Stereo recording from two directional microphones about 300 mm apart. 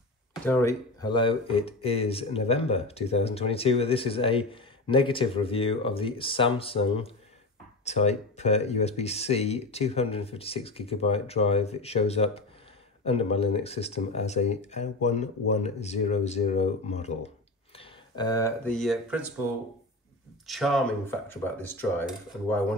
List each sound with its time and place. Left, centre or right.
0.5 s speech: centre
20.4 s speech: centre